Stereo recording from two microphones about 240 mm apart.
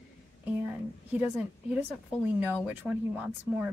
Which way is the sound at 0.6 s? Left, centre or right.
Centre.